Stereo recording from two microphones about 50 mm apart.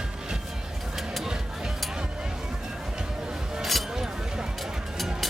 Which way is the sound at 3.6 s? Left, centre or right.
Centre.